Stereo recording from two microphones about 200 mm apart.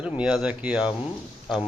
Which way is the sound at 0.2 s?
5° right (ahead or behind).